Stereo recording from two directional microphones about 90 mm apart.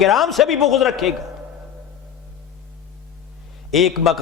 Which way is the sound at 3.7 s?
Centre (ahead or behind).